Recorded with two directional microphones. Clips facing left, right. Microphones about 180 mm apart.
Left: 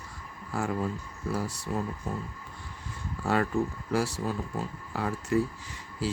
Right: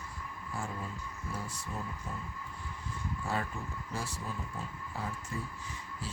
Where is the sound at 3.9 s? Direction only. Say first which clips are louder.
Left 12 dB; 80° left.